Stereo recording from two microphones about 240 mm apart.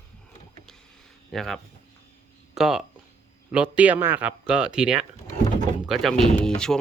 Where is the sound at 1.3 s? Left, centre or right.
Centre.